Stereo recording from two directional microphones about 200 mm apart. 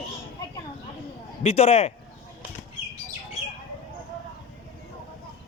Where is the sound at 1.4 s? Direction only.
30° left (ahead or behind).